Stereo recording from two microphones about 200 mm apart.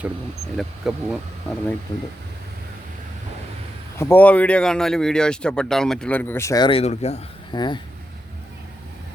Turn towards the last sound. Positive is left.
turn(degrees=20)  # may be behind; listen again after turning